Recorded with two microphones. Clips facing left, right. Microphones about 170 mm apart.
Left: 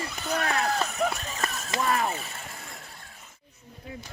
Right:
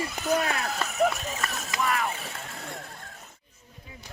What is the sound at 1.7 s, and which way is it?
Speech, 35° left (ahead or behind).